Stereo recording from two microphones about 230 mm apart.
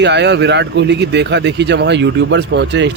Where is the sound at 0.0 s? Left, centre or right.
Right.